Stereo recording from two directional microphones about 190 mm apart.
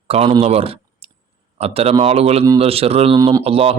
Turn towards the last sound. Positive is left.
turn(degrees=-30)  # may be behind; listen again after turning